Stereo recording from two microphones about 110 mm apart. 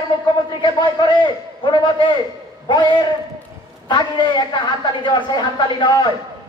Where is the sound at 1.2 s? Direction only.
45° left (ahead or behind).